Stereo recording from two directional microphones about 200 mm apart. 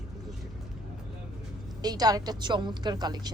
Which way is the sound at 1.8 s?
20° right (ahead or behind).